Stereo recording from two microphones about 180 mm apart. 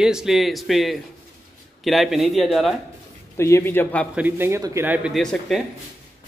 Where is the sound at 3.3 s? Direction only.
15° left (ahead or behind).